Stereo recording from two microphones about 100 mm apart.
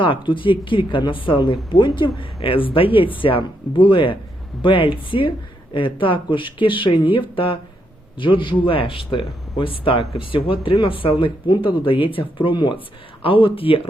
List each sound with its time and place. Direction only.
0.0 s speech: 55° left (ahead or behind)